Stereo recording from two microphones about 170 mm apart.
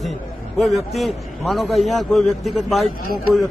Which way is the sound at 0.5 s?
Centre (ahead or behind).